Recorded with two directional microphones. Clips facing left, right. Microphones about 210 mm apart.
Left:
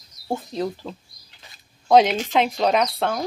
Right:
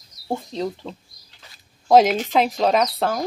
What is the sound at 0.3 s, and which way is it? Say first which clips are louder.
Speech: even; 5° left (ahead or behind).